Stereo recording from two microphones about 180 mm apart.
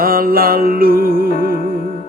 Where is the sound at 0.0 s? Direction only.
55° right (ahead or behind).